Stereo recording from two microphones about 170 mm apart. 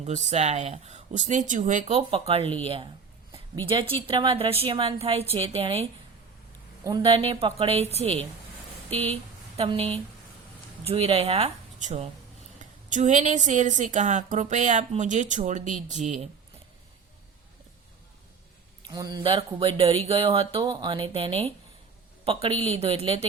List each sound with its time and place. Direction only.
0.3 s a woman's voice: 40° right (ahead or behind)
7.0 s speech: 35° right (ahead or behind)
9.6 s a woman's voice: 35° right (ahead or behind)
18.9 s speech: 25° right (ahead or behind)